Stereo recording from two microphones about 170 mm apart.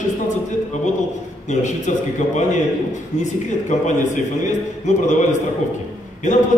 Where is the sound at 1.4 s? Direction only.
45° left (ahead or behind).